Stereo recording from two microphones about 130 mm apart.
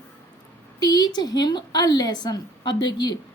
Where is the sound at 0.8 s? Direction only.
30° left (ahead or behind).